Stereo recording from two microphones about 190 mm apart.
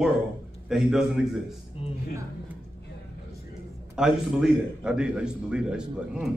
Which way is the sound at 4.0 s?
5° right (ahead or behind).